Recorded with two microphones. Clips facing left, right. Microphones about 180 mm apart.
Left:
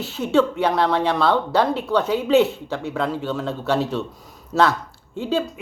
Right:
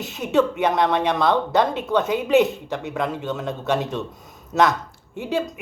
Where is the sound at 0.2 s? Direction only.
15° right (ahead or behind).